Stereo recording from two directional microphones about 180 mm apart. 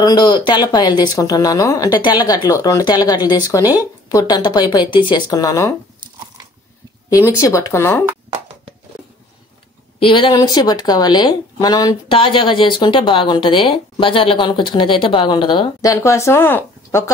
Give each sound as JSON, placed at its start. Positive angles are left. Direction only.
{"t": 0.0, "sound": "speech", "side_deg": 25}
{"t": 7.2, "sound": "speech", "side_deg": 15}
{"t": 9.9, "sound": "speech", "side_deg": 30}